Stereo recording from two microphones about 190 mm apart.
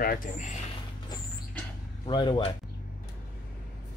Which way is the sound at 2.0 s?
25° left (ahead or behind).